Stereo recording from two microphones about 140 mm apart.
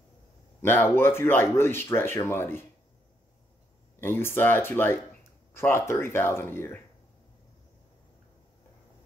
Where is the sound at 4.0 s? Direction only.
15° left (ahead or behind).